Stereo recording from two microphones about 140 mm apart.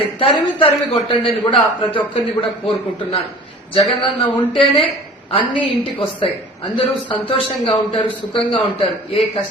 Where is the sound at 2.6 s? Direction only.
45° left (ahead or behind).